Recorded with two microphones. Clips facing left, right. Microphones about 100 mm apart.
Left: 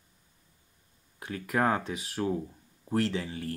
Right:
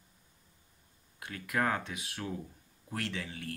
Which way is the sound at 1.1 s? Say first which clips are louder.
Left 4 dB; 30° left (ahead or behind).